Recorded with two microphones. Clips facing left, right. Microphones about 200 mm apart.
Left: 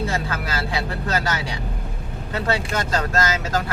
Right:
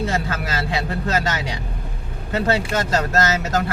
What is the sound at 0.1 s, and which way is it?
Vehicle, 25° right (ahead or behind).